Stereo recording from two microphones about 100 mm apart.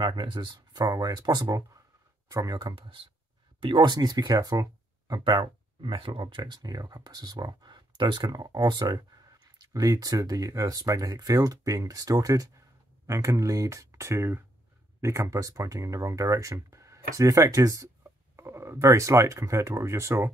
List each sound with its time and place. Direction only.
0.0 s speech: 50° right (ahead or behind)
2.7 s speech: 60° right (ahead or behind); by 20.2 s 30° right (ahead or behind)